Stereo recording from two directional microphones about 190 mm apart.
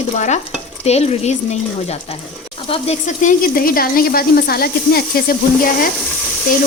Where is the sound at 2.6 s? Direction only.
30° left (ahead or behind); by 5.4 s 55° left (ahead or behind).